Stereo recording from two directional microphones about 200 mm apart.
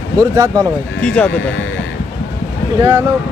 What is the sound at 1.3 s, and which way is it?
Speech, 70° left (ahead or behind).